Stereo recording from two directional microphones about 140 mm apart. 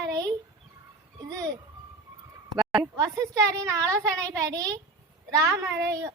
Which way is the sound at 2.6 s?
Centre (ahead or behind).